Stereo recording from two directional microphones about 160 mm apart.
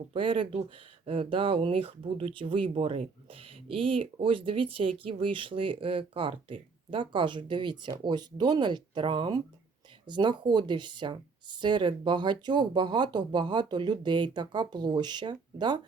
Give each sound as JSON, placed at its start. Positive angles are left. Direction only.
{"t": 0.1, "sound": "speech", "side_deg": -35}